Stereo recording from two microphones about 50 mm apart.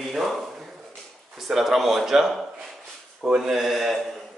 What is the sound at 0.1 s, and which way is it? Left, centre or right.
Speech, centre.